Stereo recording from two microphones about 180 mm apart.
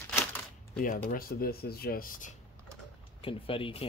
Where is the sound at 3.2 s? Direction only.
30° left (ahead or behind).